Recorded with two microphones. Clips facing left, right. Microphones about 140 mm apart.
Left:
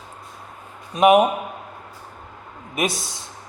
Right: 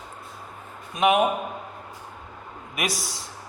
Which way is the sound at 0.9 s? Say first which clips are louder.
Left 6 dB; 40° left (ahead or behind).